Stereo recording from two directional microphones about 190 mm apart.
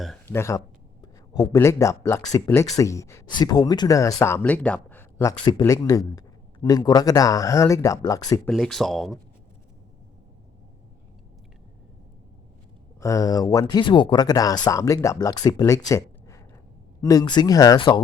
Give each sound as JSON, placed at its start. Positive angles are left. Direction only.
{"t": 0.3, "sound": "speech", "side_deg": 15}
{"t": 8.4, "sound": "speech", "side_deg": 0}
{"t": 13.0, "sound": "speech", "side_deg": 15}